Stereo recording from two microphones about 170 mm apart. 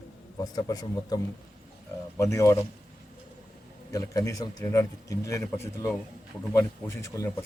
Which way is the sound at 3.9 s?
20° left (ahead or behind).